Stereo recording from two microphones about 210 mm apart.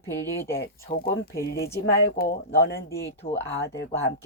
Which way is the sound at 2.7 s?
15° left (ahead or behind).